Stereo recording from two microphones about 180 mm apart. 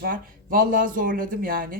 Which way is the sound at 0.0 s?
55° right (ahead or behind).